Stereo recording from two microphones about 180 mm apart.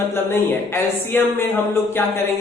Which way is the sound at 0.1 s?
15° left (ahead or behind).